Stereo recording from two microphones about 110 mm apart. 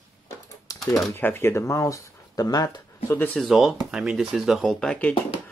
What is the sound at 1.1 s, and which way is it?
Speech, 20° left (ahead or behind).